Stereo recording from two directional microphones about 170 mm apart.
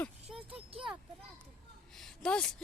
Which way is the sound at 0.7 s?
30° right (ahead or behind).